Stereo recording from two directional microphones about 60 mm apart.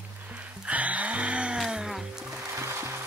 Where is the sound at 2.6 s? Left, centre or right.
Right.